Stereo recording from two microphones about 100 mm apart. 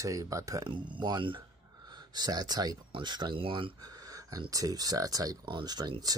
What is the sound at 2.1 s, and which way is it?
Speech, 40° right (ahead or behind).